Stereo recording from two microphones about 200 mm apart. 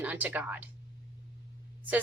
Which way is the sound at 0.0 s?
10° right (ahead or behind).